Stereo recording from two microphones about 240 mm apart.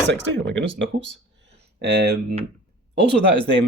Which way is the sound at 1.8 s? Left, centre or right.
Right.